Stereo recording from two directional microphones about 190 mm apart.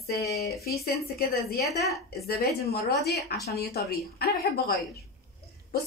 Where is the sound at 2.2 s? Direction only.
55° left (ahead or behind).